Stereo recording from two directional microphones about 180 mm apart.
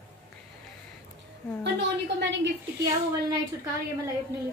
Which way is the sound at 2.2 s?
85° right.